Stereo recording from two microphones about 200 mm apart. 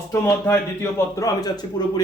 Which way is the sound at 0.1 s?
15° left (ahead or behind).